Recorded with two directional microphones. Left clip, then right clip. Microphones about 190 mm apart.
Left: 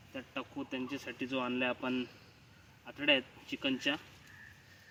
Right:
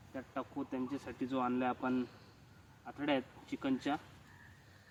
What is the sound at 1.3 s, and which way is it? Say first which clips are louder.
Speech: left 1 dB; 10° right (ahead or behind).